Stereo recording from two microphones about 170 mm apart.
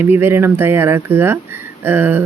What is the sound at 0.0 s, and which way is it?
Speech, 15° right (ahead or behind).